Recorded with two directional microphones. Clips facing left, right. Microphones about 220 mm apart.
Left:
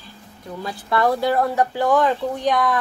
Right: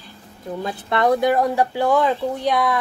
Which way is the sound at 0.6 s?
20° right (ahead or behind).